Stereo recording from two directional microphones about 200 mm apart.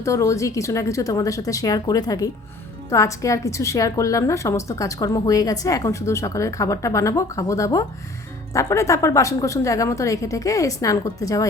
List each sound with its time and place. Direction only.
0.0 s a woman's voice: 15° left (ahead or behind)